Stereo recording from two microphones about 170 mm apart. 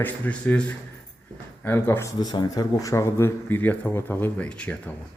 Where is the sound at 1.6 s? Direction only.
10° left (ahead or behind).